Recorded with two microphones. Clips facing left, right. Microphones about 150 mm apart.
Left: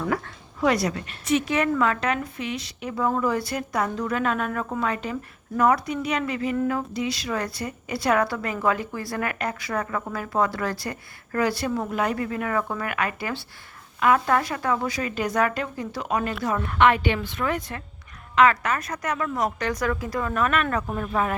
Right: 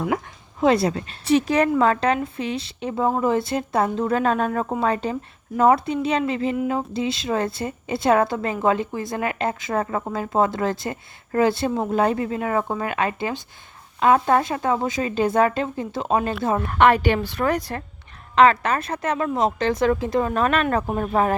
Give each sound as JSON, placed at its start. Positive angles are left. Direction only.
{"t": 0.6, "sound": "a woman's voice", "side_deg": -25}
{"t": 16.6, "sound": "a woman's voice", "side_deg": -40}